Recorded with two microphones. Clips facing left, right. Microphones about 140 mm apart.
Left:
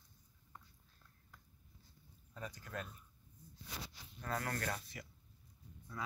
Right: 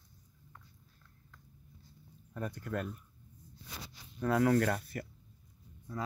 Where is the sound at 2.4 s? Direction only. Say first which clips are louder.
Right 9 dB; 55° right (ahead or behind).